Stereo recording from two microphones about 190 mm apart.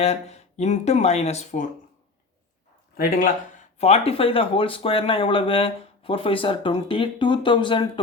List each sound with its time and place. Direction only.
0.0 s speech: 35° left (ahead or behind)
3.0 s speech: 45° left (ahead or behind)
3.8 s speech: 35° left (ahead or behind)